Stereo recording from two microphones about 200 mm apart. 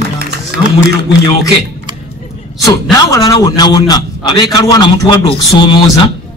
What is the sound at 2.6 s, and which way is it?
A man's voice, 20° left (ahead or behind).